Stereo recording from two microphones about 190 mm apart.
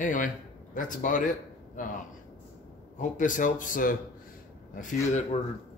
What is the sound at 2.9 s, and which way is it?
A man's voice, 40° left (ahead or behind).